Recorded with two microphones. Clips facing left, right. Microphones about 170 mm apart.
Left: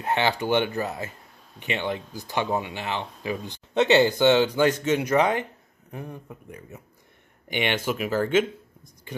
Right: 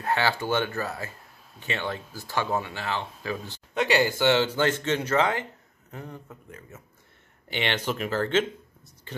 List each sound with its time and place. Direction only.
0.0 s speech: 20° left (ahead or behind)